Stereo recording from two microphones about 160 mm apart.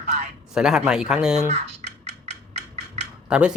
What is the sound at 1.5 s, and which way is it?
Music, 45° right (ahead or behind).